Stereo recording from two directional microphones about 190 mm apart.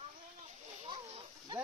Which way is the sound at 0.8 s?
30° right (ahead or behind).